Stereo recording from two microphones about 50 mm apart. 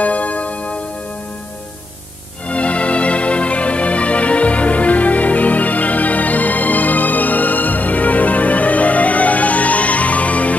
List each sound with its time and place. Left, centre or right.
0.0 s music: left
2.4 s music: left